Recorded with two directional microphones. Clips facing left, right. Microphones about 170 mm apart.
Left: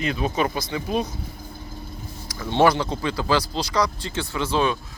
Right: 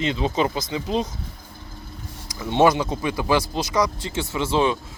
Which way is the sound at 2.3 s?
15° right (ahead or behind).